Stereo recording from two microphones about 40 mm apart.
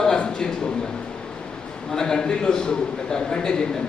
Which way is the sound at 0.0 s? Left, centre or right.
Centre.